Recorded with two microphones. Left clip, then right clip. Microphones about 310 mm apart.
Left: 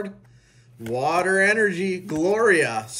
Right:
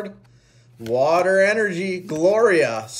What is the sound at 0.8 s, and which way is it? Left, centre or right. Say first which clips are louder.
Speech: right 4 dB; centre.